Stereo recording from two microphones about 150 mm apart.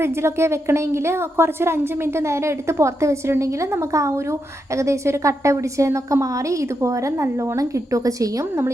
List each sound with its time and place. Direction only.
0.0 s a woman's voice: 15° right (ahead or behind)